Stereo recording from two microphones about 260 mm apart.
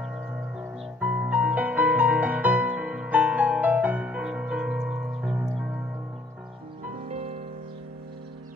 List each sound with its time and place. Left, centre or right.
0.0 s music: centre
6.9 s music: right